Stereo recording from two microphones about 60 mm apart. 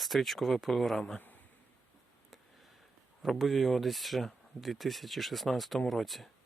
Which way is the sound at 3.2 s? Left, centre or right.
Centre.